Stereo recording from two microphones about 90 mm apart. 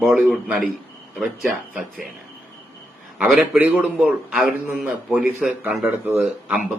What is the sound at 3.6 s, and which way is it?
A man's voice, 15° right (ahead or behind).